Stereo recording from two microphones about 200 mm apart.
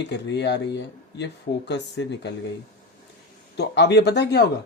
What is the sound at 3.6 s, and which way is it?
Speech, 60° left (ahead or behind).